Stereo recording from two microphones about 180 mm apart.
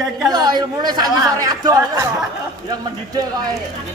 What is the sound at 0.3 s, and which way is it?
Speech, 25° right (ahead or behind).